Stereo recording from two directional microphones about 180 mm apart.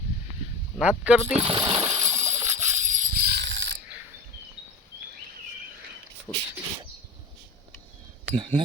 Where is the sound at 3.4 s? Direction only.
80° right.